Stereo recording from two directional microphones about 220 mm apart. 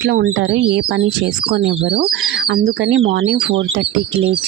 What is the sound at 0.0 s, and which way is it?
Speech, 45° right (ahead or behind).